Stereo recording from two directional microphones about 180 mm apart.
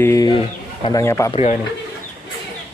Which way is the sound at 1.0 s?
15° left (ahead or behind).